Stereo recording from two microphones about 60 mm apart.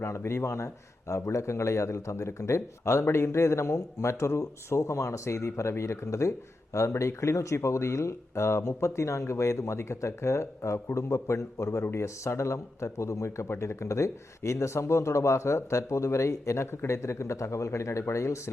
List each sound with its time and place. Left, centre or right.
0.3 s a man's voice: left